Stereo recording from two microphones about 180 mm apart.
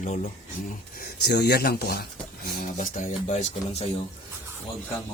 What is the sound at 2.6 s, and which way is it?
Speech, 45° left (ahead or behind).